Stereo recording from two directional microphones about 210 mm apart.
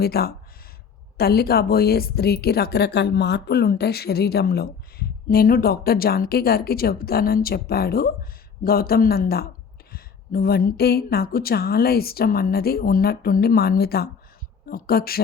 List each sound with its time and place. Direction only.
0.0 s a woman's voice: 45° left (ahead or behind)